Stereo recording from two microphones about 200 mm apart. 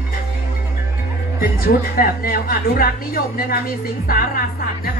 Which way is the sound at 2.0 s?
45° left (ahead or behind).